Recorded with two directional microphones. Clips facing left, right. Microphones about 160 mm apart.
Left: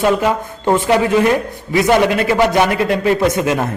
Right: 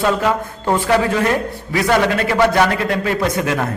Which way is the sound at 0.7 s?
20° left (ahead or behind).